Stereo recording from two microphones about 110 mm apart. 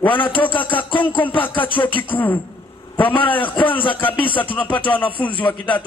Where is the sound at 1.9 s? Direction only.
15° left (ahead or behind).